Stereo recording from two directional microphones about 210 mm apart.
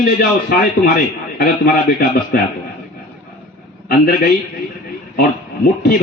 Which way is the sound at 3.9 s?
50° left (ahead or behind).